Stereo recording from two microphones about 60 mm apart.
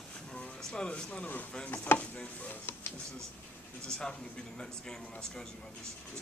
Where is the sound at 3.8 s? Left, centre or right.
Centre.